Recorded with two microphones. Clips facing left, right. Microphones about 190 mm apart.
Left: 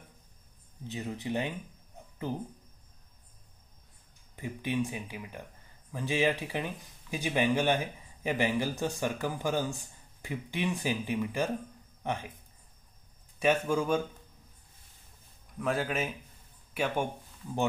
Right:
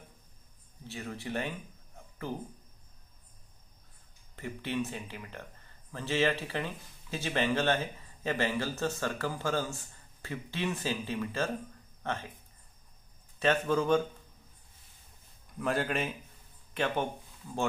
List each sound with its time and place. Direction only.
0.8 s speech: 20° left (ahead or behind)
2.0 s a sound: 20° left (ahead or behind)
4.4 s speech: 15° left (ahead or behind)
13.4 s speech: 10° left (ahead or behind)
15.6 s a man's voice: centre (ahead or behind)